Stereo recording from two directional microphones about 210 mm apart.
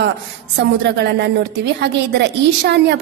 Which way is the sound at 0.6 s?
55° right (ahead or behind).